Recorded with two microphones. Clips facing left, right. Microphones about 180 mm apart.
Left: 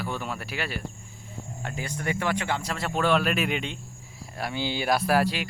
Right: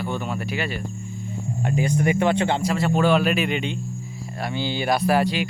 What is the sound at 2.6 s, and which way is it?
Speech, 5° right (ahead or behind).